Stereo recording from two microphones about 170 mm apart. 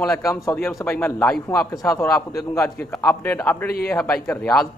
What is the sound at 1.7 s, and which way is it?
A man's voice, 20° left (ahead or behind).